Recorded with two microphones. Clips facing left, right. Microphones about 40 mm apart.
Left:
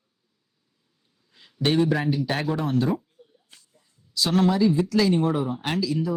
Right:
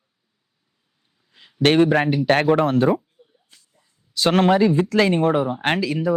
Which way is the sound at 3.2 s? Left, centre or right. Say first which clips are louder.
Left 1 dB; centre.